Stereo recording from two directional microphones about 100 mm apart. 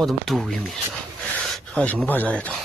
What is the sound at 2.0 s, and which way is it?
Speech, 15° left (ahead or behind).